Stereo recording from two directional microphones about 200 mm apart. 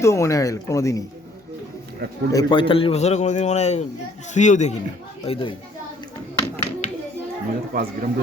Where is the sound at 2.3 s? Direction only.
20° left (ahead or behind); by 4.8 s 35° left (ahead or behind).